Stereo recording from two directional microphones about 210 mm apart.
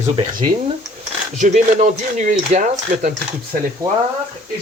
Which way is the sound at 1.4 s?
35° right (ahead or behind).